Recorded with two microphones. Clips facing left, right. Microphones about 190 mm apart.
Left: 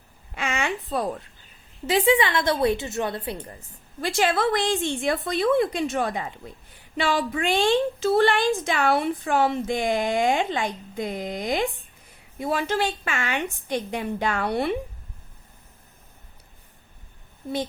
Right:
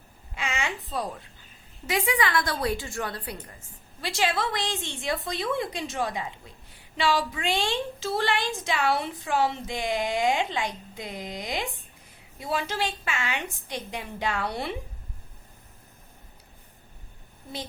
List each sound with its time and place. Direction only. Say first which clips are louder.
0.3 s a sound: left 4 dB; 55° left (ahead or behind)
1.9 s a woman's voice: left 6 dB; 30° left (ahead or behind)
4.0 s a woman's voice: left 5 dB; 50° left (ahead or behind)